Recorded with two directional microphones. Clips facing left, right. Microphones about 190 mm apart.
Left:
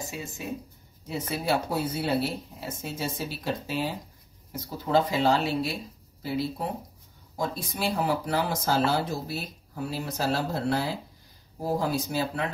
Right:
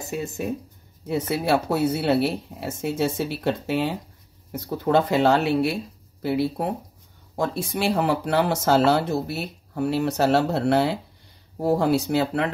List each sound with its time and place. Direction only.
0.1 s speech: 55° right (ahead or behind)
1.0 s speech: 70° right (ahead or behind)